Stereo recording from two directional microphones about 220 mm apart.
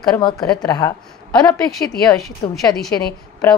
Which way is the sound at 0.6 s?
15° left (ahead or behind).